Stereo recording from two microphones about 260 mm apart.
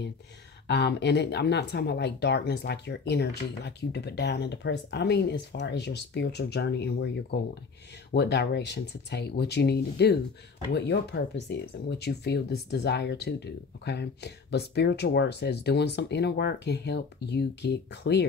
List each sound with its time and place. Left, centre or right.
0.7 s speech: left